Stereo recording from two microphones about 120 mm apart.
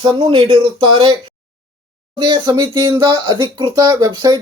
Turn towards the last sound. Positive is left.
turn(degrees=-30)  # may be behind; listen again after turning